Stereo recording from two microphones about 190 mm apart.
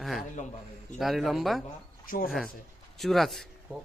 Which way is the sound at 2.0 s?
45° left (ahead or behind).